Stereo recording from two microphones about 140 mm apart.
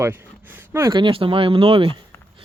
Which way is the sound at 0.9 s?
35° right (ahead or behind).